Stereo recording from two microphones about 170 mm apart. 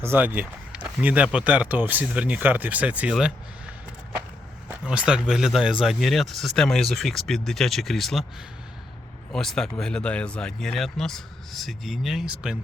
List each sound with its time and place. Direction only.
0.0 s speech: 15° right (ahead or behind)
4.8 s speech: 5° right (ahead or behind)
9.3 s speech: 5° left (ahead or behind)